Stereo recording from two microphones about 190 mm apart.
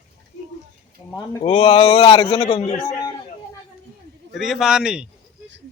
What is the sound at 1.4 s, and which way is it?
A man's voice, 30° left (ahead or behind).